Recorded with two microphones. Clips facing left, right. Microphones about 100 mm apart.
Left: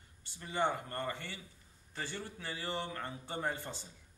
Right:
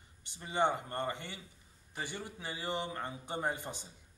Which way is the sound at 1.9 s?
15° right (ahead or behind).